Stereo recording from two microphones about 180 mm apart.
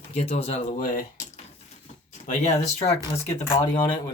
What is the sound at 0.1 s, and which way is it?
Speech, 35° left (ahead or behind).